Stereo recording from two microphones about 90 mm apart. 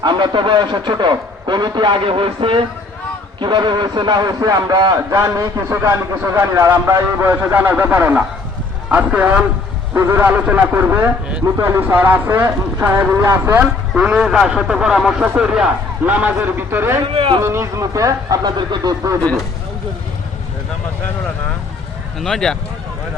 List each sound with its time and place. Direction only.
0.0 s a man's voice: 60° right (ahead or behind); by 2.6 s 80° right
3.4 s a man's voice: 60° right (ahead or behind); by 9.5 s 15° right (ahead or behind)
9.9 s speech: 30° right (ahead or behind)
11.5 s speech: 35° right (ahead or behind)
11.8 s speech: 20° right (ahead or behind)
14.0 s a man's voice: 10° right (ahead or behind); by 17.0 s 25° right (ahead or behind)
17.2 s a man's voice: 65° right (ahead or behind)
17.4 s speech: 30° right (ahead or behind)
22.2 s speech: 5° left (ahead or behind)